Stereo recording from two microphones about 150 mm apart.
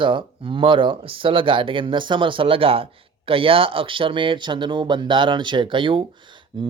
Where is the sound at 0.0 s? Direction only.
35° right (ahead or behind).